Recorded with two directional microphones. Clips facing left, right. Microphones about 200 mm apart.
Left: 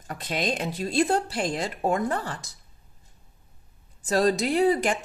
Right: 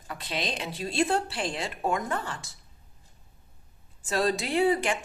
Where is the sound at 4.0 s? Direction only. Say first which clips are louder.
Left 5 dB; 40° left (ahead or behind).